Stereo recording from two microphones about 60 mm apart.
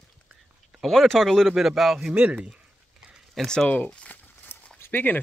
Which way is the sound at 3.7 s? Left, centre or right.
Left.